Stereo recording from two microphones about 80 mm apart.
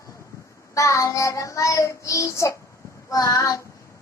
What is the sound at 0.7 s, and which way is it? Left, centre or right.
Child singing, left.